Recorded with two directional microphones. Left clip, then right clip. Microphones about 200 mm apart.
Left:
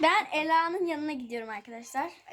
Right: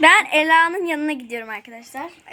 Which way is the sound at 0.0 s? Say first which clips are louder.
Right 12 dB; 10° right (ahead or behind).